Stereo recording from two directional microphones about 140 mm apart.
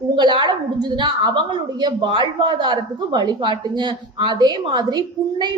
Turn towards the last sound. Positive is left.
turn(degrees=-30)  # may be behind; listen again after turning